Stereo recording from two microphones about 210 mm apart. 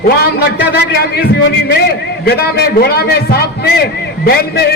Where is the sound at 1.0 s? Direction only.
50° left (ahead or behind).